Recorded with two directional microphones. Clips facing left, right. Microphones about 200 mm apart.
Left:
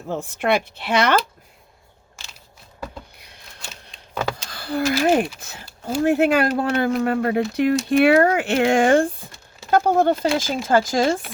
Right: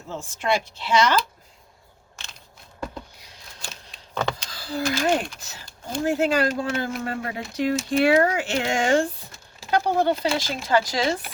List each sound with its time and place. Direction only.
0.1 s speech: 60° left (ahead or behind)
3.2 s a sound: 60° left (ahead or behind)
4.1 s speech: 10° left (ahead or behind)
4.4 s speech: 60° left (ahead or behind)